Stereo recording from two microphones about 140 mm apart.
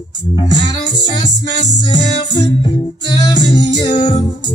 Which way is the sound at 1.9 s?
30° left (ahead or behind).